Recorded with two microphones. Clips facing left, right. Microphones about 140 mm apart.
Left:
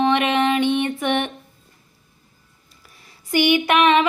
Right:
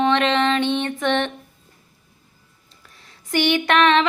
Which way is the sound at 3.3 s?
10° left (ahead or behind).